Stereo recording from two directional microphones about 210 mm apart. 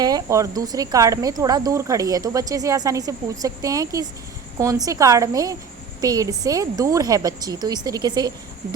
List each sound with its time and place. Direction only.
0.0 s a woman's voice: 20° right (ahead or behind)